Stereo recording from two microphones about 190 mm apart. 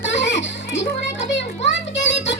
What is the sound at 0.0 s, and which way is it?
Music, 70° left (ahead or behind).